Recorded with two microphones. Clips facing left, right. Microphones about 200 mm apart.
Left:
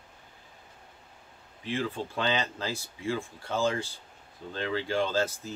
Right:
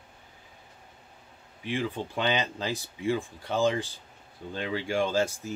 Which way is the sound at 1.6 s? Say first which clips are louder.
Right 1 dB; 15° right (ahead or behind).